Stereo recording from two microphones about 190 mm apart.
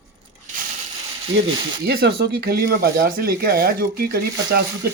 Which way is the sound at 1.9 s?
55° right (ahead or behind).